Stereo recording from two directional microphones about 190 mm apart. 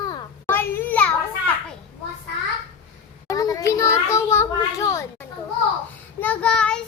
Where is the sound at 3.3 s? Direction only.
20° left (ahead or behind).